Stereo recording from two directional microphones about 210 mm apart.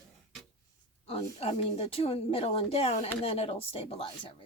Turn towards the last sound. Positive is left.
turn(degrees=25)  # may be behind; listen again after turning